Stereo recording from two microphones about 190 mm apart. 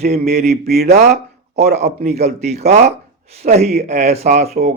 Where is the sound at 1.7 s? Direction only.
40° right (ahead or behind).